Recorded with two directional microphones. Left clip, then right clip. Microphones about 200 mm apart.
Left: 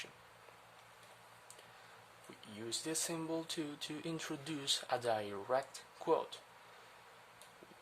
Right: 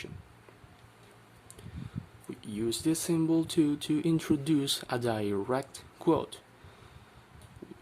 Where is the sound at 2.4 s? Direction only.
15° right (ahead or behind).